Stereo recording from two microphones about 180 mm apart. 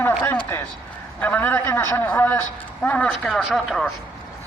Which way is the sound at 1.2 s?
10° left (ahead or behind).